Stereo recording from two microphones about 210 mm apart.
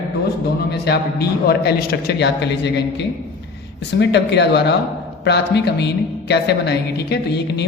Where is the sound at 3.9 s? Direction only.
55° left (ahead or behind).